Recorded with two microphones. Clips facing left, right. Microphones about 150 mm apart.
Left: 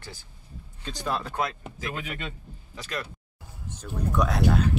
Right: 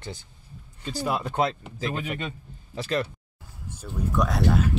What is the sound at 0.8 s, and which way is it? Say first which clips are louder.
Speech: right 3 dB; 5° right (ahead or behind).